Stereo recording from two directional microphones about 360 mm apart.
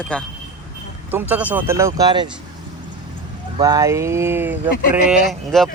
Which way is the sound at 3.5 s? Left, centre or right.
Centre.